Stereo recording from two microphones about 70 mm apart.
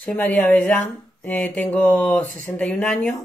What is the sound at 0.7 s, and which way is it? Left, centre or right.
Speech, left.